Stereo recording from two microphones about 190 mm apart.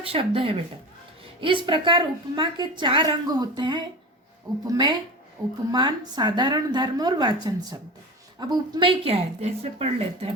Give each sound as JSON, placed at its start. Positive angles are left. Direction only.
{"t": 0.0, "sound": "a woman's voice", "side_deg": -30}